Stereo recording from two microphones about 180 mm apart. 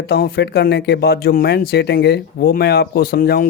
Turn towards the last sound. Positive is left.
turn(degrees=60)  # may be behind; listen again after turning